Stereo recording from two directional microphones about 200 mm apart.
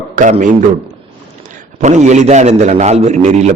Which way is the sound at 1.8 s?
35° right (ahead or behind).